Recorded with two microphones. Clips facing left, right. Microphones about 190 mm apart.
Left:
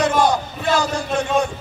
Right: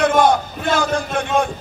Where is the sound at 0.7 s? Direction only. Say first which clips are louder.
Right 1 dB; 55° right (ahead or behind).